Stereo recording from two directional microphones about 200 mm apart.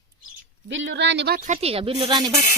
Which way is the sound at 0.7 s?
65° right (ahead or behind).